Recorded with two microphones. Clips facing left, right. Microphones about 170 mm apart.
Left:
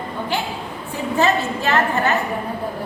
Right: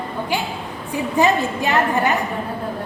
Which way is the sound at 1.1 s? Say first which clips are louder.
Right 1 dB; 15° right (ahead or behind).